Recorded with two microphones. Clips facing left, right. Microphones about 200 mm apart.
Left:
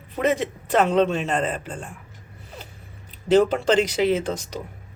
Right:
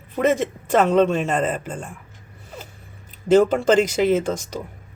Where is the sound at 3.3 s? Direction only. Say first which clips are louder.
Right 2 dB; 45° right (ahead or behind).